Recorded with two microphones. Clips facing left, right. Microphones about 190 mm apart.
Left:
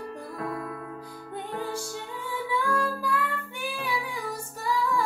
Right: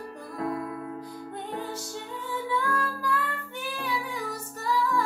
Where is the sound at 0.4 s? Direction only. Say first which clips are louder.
Right 4 dB; 25° right (ahead or behind).